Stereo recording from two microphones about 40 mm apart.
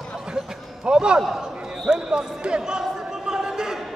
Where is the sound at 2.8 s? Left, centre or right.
Centre.